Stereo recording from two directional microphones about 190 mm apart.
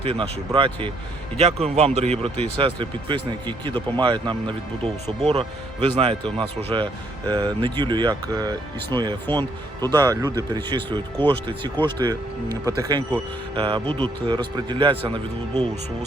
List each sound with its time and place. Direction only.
0.0 s speech: 30° right (ahead or behind)